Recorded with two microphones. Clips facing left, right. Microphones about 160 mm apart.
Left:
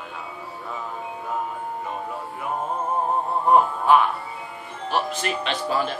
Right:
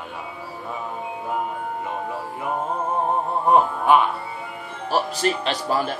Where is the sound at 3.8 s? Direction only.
15° right (ahead or behind).